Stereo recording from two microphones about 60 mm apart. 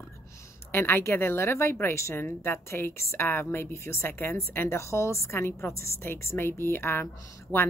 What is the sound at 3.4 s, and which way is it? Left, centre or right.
Speech, left.